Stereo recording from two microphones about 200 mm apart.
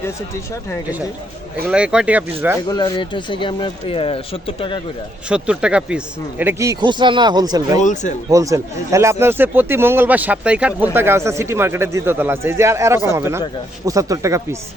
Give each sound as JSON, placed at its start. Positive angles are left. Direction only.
{"t": 1.6, "sound": "a man's voice", "side_deg": -5}
{"t": 2.6, "sound": "speech", "side_deg": 20}
{"t": 5.3, "sound": "speech", "side_deg": -5}
{"t": 7.8, "sound": "speech", "side_deg": 35}
{"t": 8.3, "sound": "a man's voice", "side_deg": -15}